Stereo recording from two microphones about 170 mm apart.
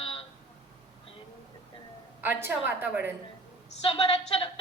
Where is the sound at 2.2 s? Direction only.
15° right (ahead or behind).